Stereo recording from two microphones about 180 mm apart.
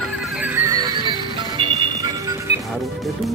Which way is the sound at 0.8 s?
25° right (ahead or behind).